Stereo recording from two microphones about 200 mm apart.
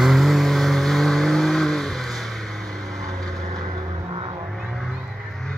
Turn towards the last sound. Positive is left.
turn(degrees=-20)  # may be behind; listen again after turning